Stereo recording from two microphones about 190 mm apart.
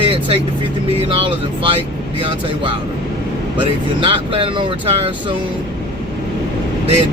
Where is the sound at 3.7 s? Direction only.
30° right (ahead or behind).